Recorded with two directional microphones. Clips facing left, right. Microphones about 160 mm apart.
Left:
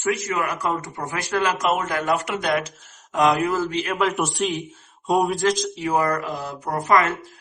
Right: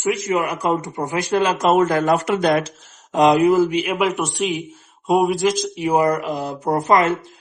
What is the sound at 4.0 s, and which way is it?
A man's voice, centre (ahead or behind).